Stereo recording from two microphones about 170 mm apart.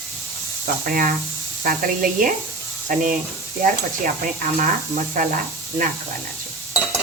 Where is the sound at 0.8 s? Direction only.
60° right (ahead or behind).